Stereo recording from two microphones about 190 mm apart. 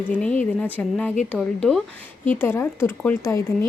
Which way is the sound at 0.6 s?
10° left (ahead or behind).